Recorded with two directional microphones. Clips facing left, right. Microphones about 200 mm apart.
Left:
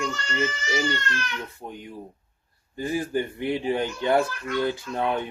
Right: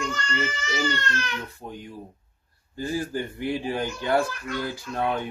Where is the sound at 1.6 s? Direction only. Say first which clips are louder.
Even; 20° left (ahead or behind).